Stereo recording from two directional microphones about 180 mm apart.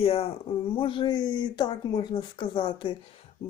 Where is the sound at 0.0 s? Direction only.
35° left (ahead or behind).